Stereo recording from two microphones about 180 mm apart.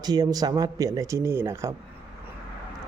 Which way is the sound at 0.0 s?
20° right (ahead or behind).